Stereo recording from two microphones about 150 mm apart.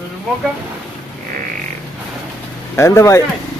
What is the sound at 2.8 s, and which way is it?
Speech, 20° left (ahead or behind).